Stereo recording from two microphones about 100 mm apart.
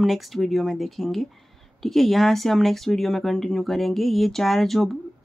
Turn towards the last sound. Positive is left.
turn(degrees=5)  # may be behind; listen again after turning